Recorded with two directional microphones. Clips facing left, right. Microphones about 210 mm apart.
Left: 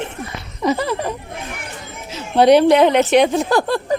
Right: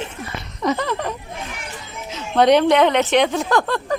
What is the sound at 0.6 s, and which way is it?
Speech, 10° left (ahead or behind).